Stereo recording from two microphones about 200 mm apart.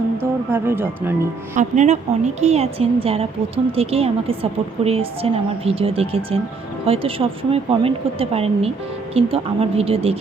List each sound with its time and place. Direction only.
0.2 s speech: 10° right (ahead or behind)
1.5 s a woman's voice: 35° right (ahead or behind)